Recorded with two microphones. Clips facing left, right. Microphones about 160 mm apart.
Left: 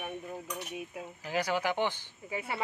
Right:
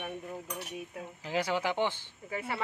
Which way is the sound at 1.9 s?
15° left (ahead or behind).